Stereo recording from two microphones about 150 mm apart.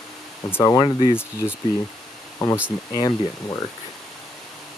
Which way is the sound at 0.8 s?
35° left (ahead or behind).